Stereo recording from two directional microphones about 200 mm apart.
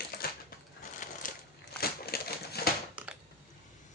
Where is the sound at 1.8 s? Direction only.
50° left (ahead or behind).